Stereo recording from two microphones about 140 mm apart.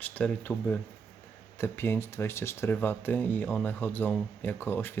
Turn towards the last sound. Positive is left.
turn(degrees=15)  # may be behind; listen again after turning